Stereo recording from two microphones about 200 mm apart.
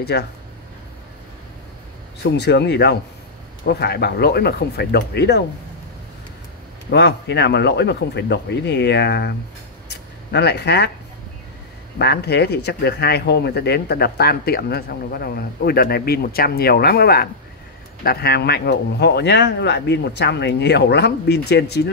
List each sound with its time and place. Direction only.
0.1 s speech: 55° left (ahead or behind)
2.3 s speech: 55° left (ahead or behind)
6.9 s speech: 60° left (ahead or behind)
9.8 s a sound: 55° left (ahead or behind)
12.0 s speech: 55° left (ahead or behind)